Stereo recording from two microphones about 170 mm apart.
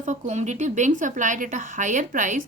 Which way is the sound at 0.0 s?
45° right (ahead or behind).